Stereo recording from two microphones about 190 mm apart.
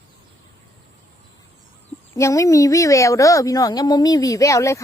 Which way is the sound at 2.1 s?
15° left (ahead or behind).